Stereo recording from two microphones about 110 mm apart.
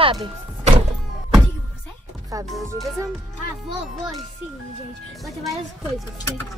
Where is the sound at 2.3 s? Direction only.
30° right (ahead or behind).